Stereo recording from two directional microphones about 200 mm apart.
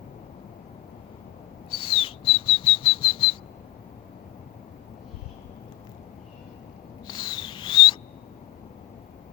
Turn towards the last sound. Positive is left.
turn(degrees=25)  # may be behind; listen again after turning